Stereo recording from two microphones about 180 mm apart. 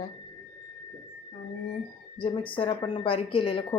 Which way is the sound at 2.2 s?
30° left (ahead or behind).